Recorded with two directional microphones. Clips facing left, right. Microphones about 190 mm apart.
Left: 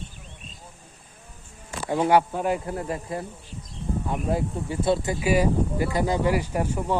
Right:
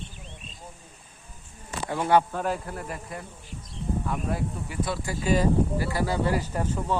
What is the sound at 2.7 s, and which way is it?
Speech, 25° left (ahead or behind).